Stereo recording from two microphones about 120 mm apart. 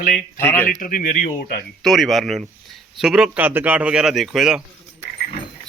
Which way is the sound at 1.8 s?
Centre (ahead or behind).